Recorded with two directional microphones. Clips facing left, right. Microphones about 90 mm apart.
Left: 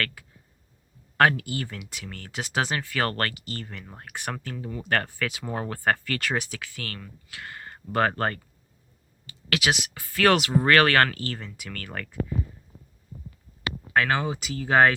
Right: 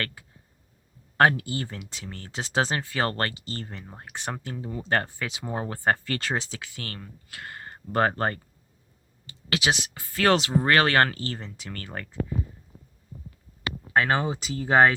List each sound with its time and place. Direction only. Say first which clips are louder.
0.0 s speech: left 2 dB; 25° right (ahead or behind)
3.8 s speech: left 2 dB; 20° right (ahead or behind)
13.9 s speech: right 1 dB; 25° right (ahead or behind)